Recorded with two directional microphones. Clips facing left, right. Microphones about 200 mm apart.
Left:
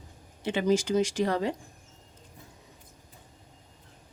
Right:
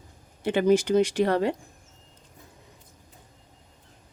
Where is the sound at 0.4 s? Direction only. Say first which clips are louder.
Right 5 dB; 60° right (ahead or behind).